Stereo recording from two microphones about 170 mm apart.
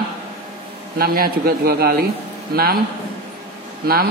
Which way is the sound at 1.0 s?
60° right (ahead or behind).